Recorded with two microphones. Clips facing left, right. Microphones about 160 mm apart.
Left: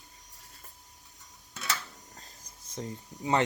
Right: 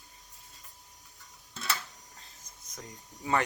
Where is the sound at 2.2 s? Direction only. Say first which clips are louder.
Left 2 dB; 30° left (ahead or behind).